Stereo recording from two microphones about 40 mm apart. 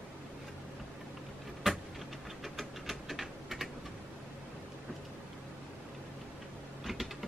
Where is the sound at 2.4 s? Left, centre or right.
Centre.